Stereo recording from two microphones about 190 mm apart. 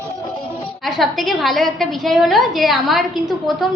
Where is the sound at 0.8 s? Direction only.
Centre (ahead or behind).